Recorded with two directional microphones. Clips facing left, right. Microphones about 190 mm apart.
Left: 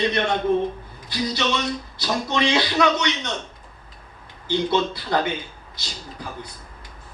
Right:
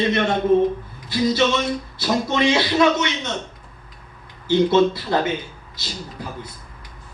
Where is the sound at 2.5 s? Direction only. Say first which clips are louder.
Right 3 dB; 20° right (ahead or behind).